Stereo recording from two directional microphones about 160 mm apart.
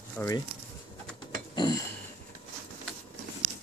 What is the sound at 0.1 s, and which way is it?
Speech, 15° left (ahead or behind).